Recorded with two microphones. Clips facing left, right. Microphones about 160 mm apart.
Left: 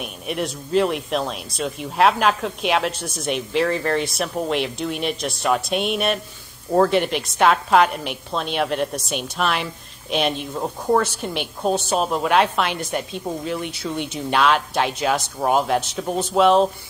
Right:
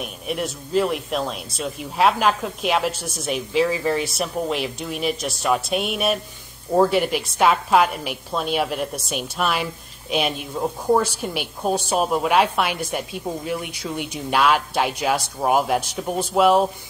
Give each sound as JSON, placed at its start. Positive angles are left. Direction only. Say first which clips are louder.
{"t": 0.0, "sound": "a woman's voice", "louder": "even", "side_deg": 0}